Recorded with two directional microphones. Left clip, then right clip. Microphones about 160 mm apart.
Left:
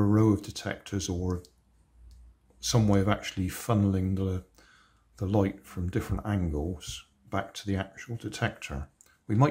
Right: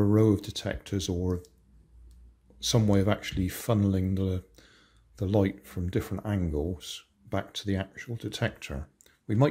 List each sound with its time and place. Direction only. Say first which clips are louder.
0.0 s speech: right 1 dB; 15° right (ahead or behind)
2.6 s speech: right 1 dB; 15° right (ahead or behind)